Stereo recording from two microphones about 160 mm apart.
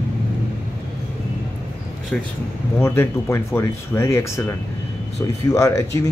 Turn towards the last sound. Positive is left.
turn(degrees=20)  # may be behind; listen again after turning